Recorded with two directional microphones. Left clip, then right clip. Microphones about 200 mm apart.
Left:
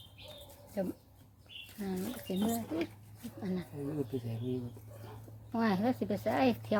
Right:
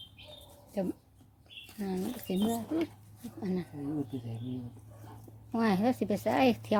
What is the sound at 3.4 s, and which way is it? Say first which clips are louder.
Speech: right 4 dB; 30° right (ahead or behind).